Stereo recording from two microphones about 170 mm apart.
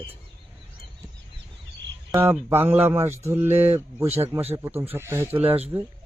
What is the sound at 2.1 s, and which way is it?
Speech, 15° right (ahead or behind).